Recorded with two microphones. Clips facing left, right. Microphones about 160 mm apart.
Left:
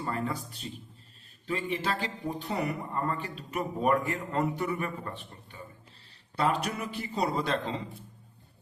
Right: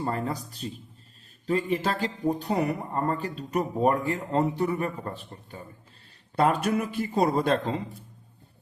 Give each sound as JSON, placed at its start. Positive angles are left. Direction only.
{"t": 0.0, "sound": "speech", "side_deg": -35}
{"t": 6.3, "sound": "speech", "side_deg": -50}